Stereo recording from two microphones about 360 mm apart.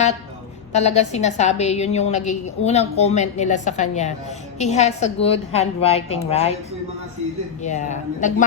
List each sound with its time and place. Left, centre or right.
0.7 s a woman's voice: centre
7.6 s speech: centre